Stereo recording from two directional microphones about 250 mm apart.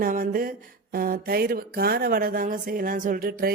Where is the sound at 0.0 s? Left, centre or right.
Right.